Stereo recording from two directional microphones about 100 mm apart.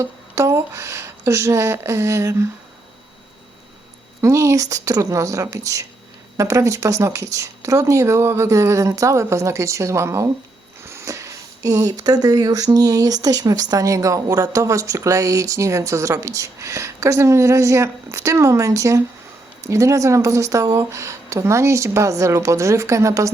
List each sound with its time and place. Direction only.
0.0 s speech: 30° right (ahead or behind)
4.2 s speech: 30° right (ahead or behind)